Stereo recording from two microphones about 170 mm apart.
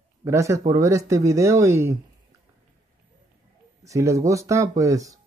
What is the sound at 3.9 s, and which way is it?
Speech, 20° right (ahead or behind).